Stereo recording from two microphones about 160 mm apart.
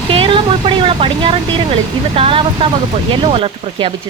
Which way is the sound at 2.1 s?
35° right (ahead or behind).